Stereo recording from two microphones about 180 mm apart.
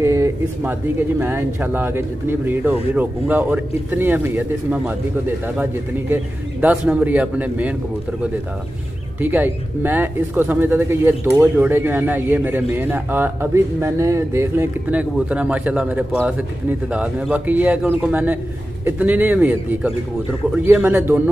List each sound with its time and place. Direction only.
0.0 s a man's voice: 15° right (ahead or behind)
9.2 s a man's voice: 10° right (ahead or behind)